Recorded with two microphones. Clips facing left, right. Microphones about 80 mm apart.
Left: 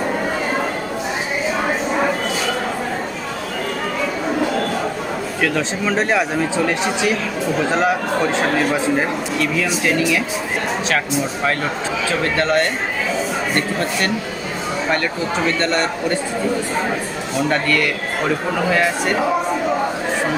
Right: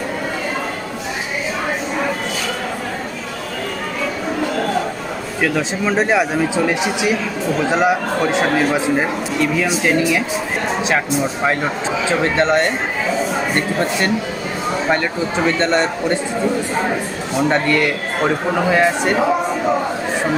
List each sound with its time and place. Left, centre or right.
5.4 s a man's voice: centre
12.1 s a man's voice: right
15.4 s a man's voice: right
17.5 s a man's voice: right